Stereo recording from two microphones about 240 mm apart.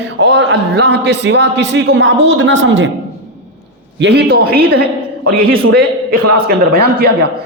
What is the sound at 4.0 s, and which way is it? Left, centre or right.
A man's voice, right.